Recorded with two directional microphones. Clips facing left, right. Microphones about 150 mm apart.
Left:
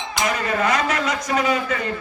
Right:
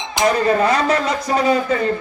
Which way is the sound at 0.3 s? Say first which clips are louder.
Right 6 dB; 35° right (ahead or behind).